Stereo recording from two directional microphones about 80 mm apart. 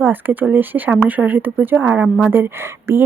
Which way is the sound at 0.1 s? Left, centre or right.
Right.